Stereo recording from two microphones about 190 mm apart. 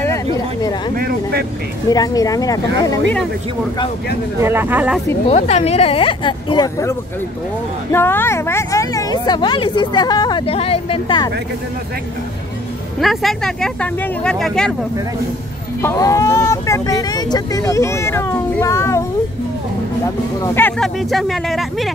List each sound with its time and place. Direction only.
0.0 s a sound: 15° left (ahead or behind)
0.9 s speech: 50° right (ahead or behind)
1.9 s speech: 20° left (ahead or behind)
4.4 s speech: 10° right (ahead or behind)
5.2 s speech: 35° left (ahead or behind)
13.0 s speech: centre (ahead or behind)
15.8 s speech: 15° left (ahead or behind)
20.4 s speech: 10° left (ahead or behind)